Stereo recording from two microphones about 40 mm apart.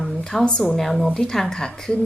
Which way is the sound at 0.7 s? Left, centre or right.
Centre.